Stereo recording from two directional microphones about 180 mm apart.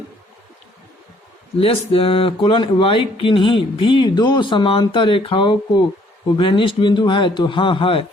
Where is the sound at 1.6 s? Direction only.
30° left (ahead or behind).